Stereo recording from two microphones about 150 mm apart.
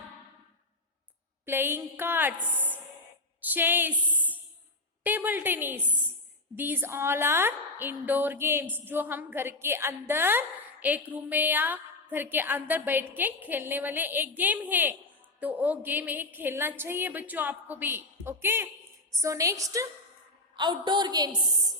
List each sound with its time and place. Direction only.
1.5 s a woman's voice: 15° right (ahead or behind)